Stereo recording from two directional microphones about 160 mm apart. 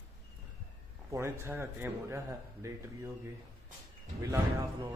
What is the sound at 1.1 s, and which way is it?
Speech, 15° right (ahead or behind).